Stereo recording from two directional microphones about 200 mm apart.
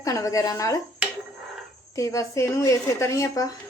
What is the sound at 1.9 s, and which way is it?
A woman's voice, 15° left (ahead or behind).